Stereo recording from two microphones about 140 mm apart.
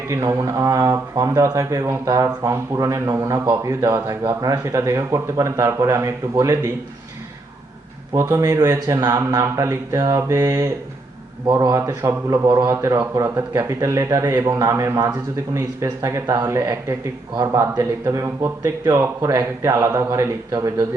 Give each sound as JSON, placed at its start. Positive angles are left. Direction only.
{"t": 0.1, "sound": "speech", "side_deg": -20}
{"t": 8.1, "sound": "speech", "side_deg": -20}